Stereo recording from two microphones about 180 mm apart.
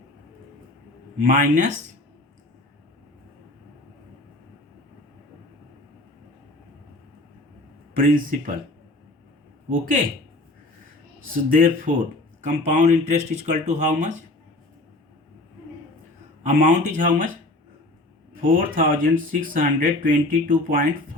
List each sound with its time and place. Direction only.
1.2 s speech: 45° right (ahead or behind)
7.9 s speech: 50° right (ahead or behind)
11.5 s speech: 50° right (ahead or behind)
16.4 s speech: 40° right (ahead or behind)
18.4 s speech: 50° right (ahead or behind)